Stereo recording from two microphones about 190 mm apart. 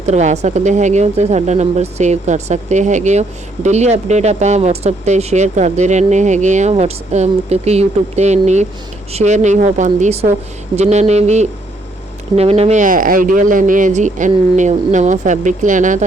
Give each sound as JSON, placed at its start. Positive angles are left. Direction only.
{"t": 0.0, "sound": "speech", "side_deg": -35}